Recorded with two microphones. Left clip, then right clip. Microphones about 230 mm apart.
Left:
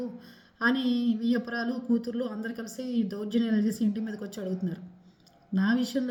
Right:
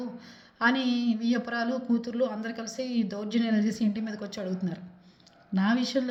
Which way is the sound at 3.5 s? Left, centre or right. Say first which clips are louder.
Right 1 dB; centre.